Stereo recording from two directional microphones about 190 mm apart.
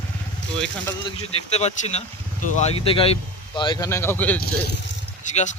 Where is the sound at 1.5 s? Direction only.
35° left (ahead or behind); by 4.4 s 10° left (ahead or behind).